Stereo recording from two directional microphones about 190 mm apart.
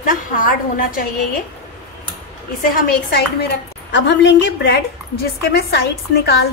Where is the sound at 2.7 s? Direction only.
50° left (ahead or behind).